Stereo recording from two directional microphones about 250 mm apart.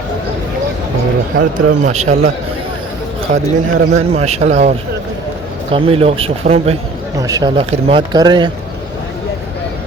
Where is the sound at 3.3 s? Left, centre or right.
Right.